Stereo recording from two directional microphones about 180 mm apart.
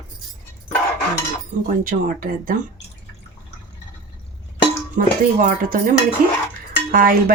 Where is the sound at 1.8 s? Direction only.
50° right (ahead or behind).